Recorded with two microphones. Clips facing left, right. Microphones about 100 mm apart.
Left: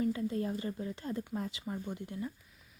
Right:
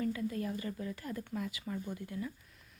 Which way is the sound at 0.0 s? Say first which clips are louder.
Left 3 dB; 25° left (ahead or behind).